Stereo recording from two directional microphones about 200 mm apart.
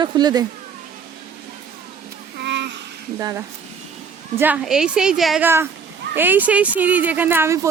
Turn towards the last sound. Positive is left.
turn(degrees=-15)  # may be behind; listen again after turning